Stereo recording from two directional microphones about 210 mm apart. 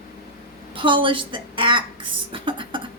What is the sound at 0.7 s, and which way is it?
A woman's voice, 25° right (ahead or behind).